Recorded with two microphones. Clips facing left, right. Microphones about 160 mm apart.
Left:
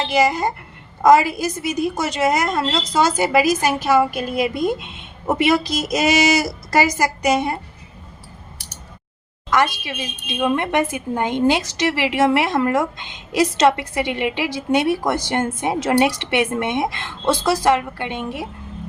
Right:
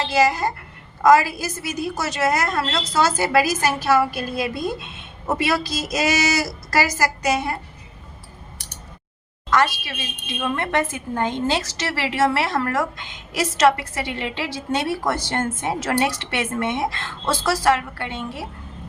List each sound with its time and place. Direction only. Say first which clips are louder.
0.1 s a woman's voice: left 1 dB; 20° left (ahead or behind)
9.8 s a woman's voice: left 4 dB; 15° left (ahead or behind)